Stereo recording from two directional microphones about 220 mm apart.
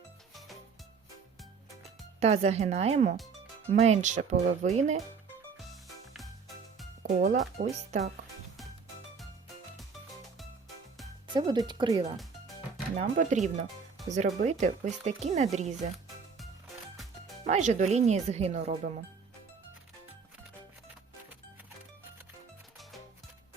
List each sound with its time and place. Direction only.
2.2 s speech: 30° right (ahead or behind)
7.0 s speech: 30° right (ahead or behind)
11.3 s speech: 20° right (ahead or behind)
13.0 s speech: 30° right (ahead or behind)
17.4 s speech: 30° right (ahead or behind)